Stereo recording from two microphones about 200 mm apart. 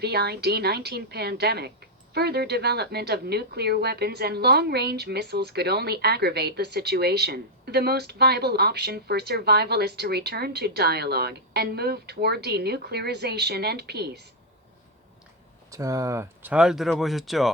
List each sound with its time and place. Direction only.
0.0 s a woman's voice: 55° right (ahead or behind)
15.7 s speech: 15° right (ahead or behind); by 17.5 s centre (ahead or behind)